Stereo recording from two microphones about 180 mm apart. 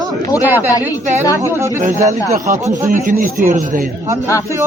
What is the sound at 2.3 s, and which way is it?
Speech, 45° right (ahead or behind).